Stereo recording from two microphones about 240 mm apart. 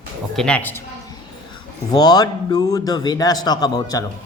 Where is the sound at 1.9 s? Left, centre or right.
Centre.